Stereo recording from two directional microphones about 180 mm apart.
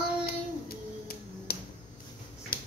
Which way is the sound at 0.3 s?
55° left (ahead or behind).